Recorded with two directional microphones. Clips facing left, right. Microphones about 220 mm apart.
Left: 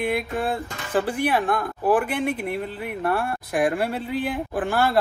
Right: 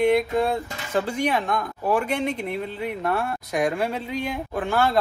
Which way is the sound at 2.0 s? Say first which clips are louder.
Even; 55° left (ahead or behind).